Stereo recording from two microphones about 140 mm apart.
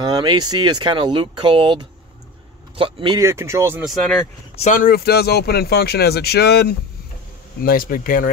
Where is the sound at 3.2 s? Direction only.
20° right (ahead or behind).